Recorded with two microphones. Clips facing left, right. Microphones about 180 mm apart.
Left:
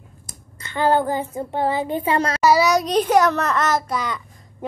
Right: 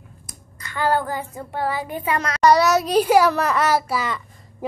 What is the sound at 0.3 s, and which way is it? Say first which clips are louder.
A child's voice: left 3 dB; 25° left (ahead or behind).